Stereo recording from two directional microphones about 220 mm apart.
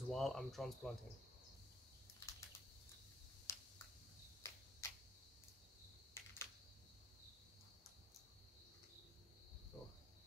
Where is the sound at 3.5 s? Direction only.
15° left (ahead or behind).